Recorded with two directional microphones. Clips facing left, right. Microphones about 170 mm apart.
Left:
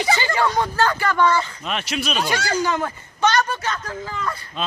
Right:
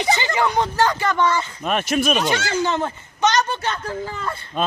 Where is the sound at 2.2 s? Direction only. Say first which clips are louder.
Right 1 dB; 25° right (ahead or behind).